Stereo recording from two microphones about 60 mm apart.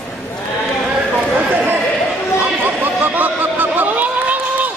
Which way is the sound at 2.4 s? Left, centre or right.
Right.